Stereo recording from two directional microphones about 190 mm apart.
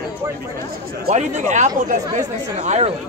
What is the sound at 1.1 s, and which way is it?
Speech, 40° right (ahead or behind).